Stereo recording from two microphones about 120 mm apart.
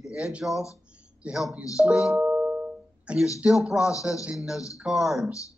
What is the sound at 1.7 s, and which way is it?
Music, 5° right (ahead or behind).